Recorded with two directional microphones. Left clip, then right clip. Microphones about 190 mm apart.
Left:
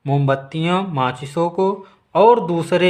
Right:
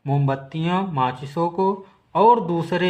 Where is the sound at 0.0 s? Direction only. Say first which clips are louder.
Left 5 dB; 25° left (ahead or behind).